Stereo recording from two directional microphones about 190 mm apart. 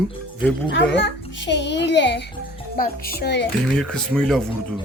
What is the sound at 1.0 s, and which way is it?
A child's voice, 65° left (ahead or behind).